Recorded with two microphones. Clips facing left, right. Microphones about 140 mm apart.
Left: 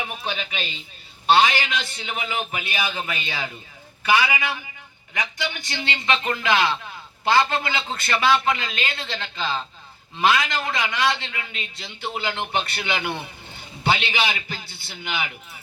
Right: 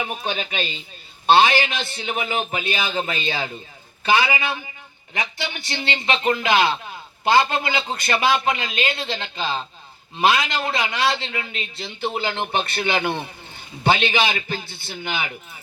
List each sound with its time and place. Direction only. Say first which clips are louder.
0.0 s a man's voice: right 3 dB; 40° right (ahead or behind)